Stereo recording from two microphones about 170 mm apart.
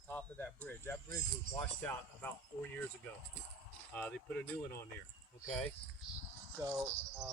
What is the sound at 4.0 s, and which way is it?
Speech, 10° left (ahead or behind).